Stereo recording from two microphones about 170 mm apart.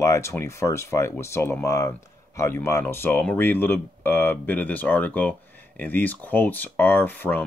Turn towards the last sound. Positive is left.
turn(degrees=10)  # may be behind; listen again after turning